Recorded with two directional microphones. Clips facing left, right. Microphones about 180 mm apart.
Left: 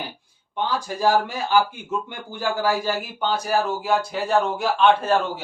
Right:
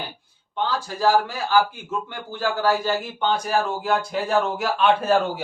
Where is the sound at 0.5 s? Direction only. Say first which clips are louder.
Even; 15° left (ahead or behind).